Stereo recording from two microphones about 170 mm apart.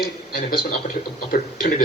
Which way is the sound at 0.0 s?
65° left (ahead or behind).